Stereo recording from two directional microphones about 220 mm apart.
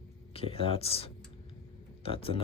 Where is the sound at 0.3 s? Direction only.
25° left (ahead or behind).